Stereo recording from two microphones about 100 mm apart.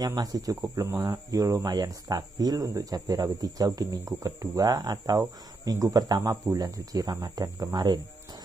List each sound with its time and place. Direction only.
0.0 s speech: 40° right (ahead or behind)